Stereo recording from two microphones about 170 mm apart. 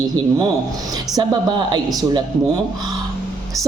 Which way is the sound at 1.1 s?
25° right (ahead or behind).